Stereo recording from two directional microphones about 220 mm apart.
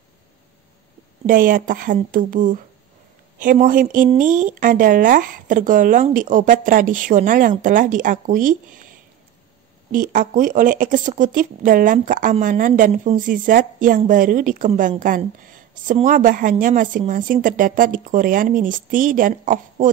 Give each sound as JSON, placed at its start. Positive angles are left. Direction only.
{"t": 1.2, "sound": "a woman's voice", "side_deg": -40}
{"t": 9.8, "sound": "a woman's voice", "side_deg": -40}